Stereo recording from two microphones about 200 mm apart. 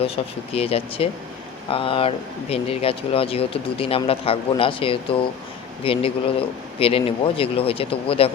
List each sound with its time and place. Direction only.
0.2 s speech: 30° left (ahead or behind)